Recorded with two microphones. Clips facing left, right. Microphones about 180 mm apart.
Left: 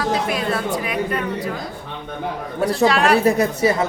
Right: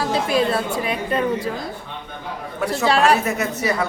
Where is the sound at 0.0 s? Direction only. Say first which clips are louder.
Right 2 dB; 30° right (ahead or behind).